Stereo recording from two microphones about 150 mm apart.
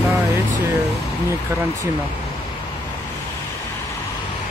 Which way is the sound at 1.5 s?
20° right (ahead or behind).